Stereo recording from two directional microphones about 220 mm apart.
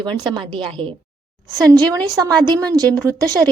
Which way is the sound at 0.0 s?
20° right (ahead or behind).